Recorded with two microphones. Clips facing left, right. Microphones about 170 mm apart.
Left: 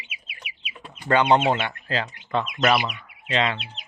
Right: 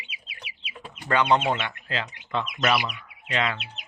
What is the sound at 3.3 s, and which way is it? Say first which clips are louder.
Speech: left 3 dB; 30° left (ahead or behind).